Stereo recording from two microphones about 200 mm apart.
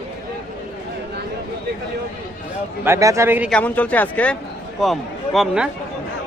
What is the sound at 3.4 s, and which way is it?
A man's voice, 5° left (ahead or behind).